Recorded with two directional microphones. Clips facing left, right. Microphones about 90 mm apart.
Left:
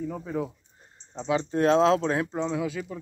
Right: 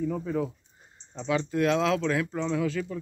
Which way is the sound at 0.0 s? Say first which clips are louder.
Right 2 dB; 10° left (ahead or behind).